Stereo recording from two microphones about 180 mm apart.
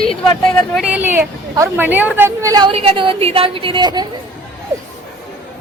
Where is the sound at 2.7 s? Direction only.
30° right (ahead or behind).